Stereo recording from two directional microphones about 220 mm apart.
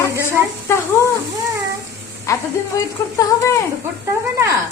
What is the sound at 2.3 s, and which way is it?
Speech, 15° left (ahead or behind).